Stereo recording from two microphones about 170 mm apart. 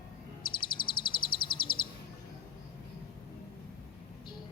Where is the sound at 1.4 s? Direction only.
30° left (ahead or behind).